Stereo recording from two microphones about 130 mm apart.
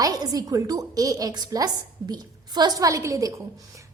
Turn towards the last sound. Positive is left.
turn(degrees=-25)  # may be behind; listen again after turning